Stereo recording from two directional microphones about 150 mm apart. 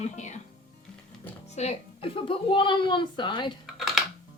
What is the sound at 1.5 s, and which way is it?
A woman's voice, 45° left (ahead or behind).